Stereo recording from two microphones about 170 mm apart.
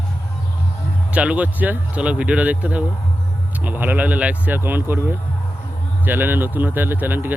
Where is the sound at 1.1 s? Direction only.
5° right (ahead or behind).